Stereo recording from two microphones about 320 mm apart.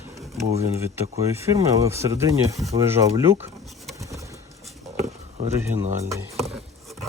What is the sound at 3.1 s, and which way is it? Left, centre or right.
Speech, centre.